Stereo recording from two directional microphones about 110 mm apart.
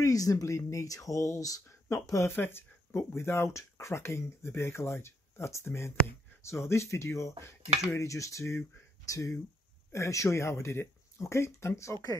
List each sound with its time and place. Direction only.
0.0 s speech: 30° left (ahead or behind)